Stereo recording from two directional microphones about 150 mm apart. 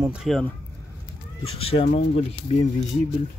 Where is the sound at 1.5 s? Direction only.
40° left (ahead or behind).